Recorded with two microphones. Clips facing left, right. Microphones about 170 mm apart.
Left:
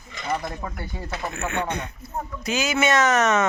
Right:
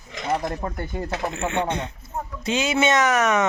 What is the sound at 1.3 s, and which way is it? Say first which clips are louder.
Speech: even; 25° right (ahead or behind).